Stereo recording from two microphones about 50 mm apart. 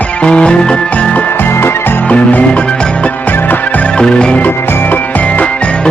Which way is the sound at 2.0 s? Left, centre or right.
Left.